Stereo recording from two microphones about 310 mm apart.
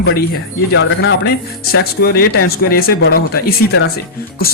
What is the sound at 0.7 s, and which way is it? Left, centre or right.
Speech, left.